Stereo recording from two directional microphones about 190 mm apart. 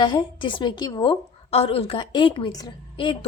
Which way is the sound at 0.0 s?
25° left (ahead or behind).